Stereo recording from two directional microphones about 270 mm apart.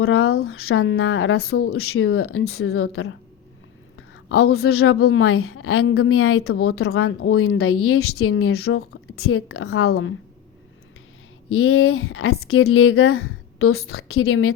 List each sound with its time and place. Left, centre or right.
0.0 s speech: left
11.5 s speech: left